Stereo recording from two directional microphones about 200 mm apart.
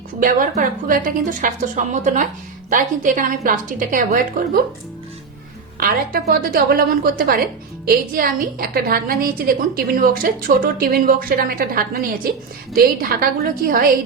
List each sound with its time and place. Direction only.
0.2 s a woman's voice: 45° right (ahead or behind)
5.7 s a woman's voice: 45° right (ahead or behind)